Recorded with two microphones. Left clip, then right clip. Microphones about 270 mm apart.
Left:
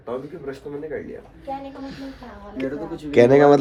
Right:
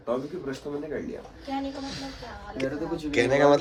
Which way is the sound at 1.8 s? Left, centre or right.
Centre.